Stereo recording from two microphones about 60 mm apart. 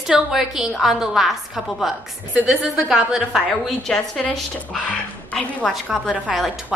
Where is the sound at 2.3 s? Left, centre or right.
Right.